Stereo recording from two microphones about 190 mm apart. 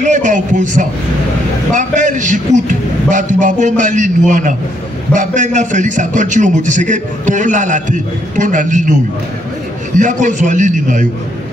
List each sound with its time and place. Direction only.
0.0 s a man's voice: 40° right (ahead or behind)
9.9 s a man's voice: 40° right (ahead or behind)